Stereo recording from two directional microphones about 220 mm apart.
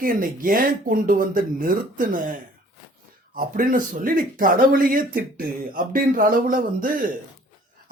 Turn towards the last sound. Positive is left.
turn(degrees=-40)  # may be behind; listen again after turning